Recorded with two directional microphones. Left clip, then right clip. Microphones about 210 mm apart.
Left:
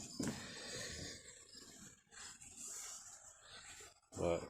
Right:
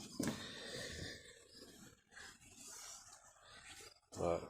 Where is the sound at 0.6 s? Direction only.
5° left (ahead or behind).